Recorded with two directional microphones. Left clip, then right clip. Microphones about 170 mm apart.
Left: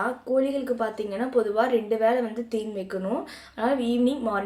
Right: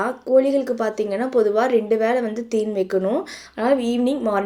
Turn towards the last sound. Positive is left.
turn(degrees=-40)  # may be behind; listen again after turning